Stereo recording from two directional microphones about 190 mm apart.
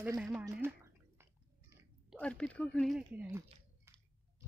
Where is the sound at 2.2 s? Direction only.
5° left (ahead or behind).